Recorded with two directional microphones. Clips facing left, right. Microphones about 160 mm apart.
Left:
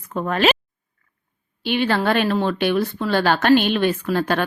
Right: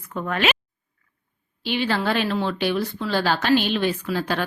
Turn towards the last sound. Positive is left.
turn(degrees=55)  # may be behind; listen again after turning